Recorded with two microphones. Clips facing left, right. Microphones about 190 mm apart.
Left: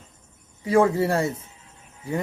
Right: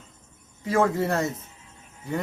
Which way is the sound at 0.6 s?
10° left (ahead or behind).